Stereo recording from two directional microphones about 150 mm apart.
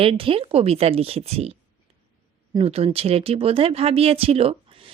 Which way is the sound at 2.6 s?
40° right (ahead or behind).